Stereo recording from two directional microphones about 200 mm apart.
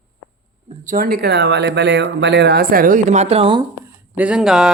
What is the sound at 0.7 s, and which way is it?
Speech, 40° right (ahead or behind).